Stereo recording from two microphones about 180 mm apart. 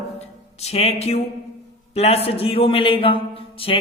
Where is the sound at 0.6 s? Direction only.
35° left (ahead or behind).